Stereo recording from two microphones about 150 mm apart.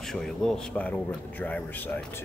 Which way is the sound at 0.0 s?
5° left (ahead or behind).